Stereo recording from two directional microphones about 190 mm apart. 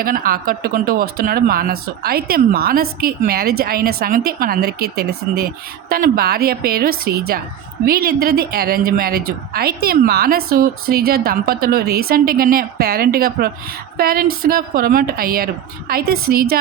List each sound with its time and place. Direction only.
0.0 s a woman's voice: 50° right (ahead or behind)